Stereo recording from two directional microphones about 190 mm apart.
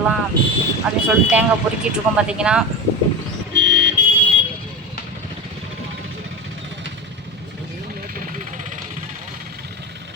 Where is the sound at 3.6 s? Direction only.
70° right (ahead or behind).